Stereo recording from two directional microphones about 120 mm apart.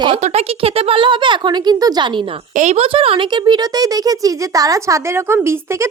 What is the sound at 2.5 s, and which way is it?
Speech, 80° right.